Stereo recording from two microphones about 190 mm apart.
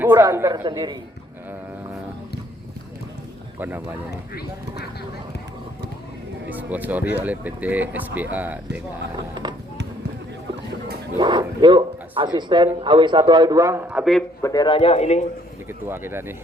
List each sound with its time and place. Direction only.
0.0 s speech: 15° right (ahead or behind)
3.6 s speech: 10° right (ahead or behind)
6.5 s speech: 10° right (ahead or behind)
9.3 s speech: 25° right (ahead or behind)
11.2 s a man's voice: 25° right (ahead or behind); by 14.3 s centre (ahead or behind)
14.4 s a man's voice: 20° left (ahead or behind)
15.9 s speech: 10° right (ahead or behind)